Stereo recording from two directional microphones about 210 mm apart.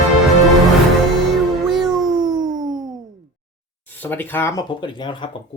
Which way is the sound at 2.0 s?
20° right (ahead or behind).